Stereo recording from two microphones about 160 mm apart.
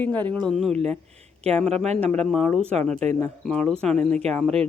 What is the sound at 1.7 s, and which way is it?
Speech, 45° right (ahead or behind).